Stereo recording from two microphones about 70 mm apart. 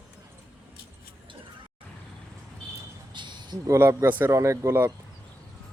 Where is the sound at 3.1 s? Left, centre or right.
Right.